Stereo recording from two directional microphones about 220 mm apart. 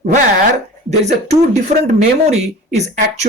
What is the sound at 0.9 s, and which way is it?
Speech, 30° right (ahead or behind).